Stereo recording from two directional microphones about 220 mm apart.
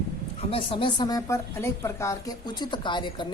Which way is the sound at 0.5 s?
25° left (ahead or behind).